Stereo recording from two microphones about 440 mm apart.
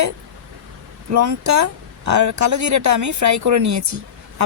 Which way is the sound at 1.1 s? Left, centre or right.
Right.